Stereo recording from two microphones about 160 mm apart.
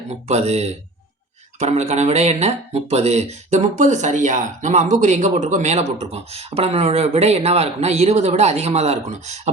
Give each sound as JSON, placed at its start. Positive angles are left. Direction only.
{"t": 0.1, "sound": "speech", "side_deg": -45}